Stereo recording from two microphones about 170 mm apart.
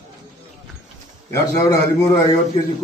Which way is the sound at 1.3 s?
15° left (ahead or behind).